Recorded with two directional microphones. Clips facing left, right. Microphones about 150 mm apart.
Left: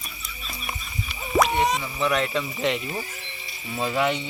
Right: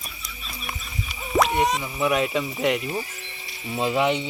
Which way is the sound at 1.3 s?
Centre (ahead or behind).